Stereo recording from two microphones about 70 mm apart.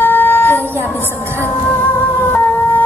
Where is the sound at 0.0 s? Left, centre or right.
Left.